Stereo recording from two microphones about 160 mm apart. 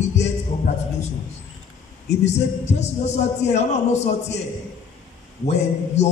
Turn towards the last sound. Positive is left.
turn(degrees=45)  # may be behind; listen again after turning